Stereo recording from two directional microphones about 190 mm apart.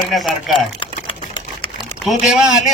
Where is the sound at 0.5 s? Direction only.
25° left (ahead or behind).